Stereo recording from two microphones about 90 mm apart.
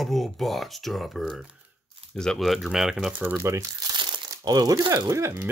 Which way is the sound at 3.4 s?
35° right (ahead or behind).